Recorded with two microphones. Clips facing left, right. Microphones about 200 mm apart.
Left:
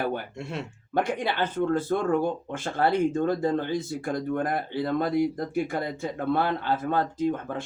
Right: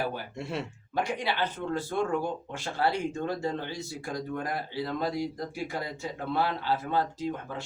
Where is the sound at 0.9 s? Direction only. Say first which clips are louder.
Left 4 dB; 50° left (ahead or behind).